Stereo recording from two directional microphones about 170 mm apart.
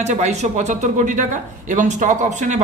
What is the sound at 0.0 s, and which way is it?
Speech, 40° right (ahead or behind).